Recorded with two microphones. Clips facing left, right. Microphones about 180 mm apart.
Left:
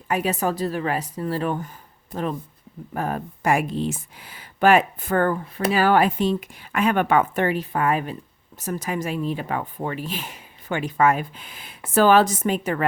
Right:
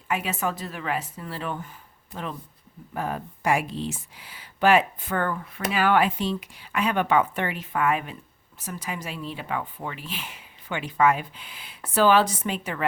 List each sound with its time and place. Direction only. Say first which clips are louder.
0.1 s speech: left 5 dB; 40° left (ahead or behind)
2.9 s speech: left 3 dB; 50° left (ahead or behind)